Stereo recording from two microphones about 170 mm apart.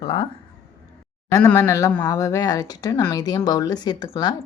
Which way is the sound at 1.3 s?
20° left (ahead or behind).